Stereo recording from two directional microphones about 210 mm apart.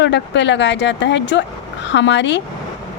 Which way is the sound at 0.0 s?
55° left (ahead or behind).